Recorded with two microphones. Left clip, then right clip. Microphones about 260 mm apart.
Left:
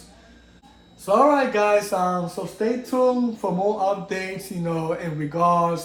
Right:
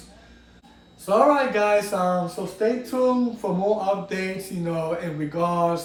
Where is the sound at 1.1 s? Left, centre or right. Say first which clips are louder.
Left 1 dB; left.